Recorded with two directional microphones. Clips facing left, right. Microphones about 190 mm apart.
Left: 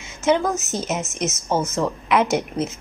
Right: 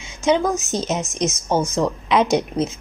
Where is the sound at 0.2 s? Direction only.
15° right (ahead or behind).